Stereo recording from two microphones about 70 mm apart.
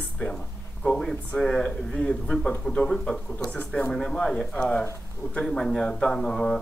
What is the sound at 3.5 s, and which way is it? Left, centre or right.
Speech, left.